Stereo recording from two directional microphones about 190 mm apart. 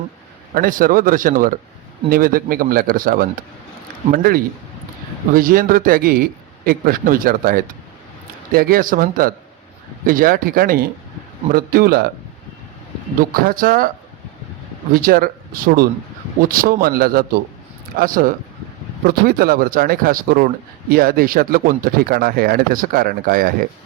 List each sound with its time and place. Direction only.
0.5 s speech: 45° right (ahead or behind)
13.3 s speech: 50° right (ahead or behind)
14.9 s speech: 50° right (ahead or behind)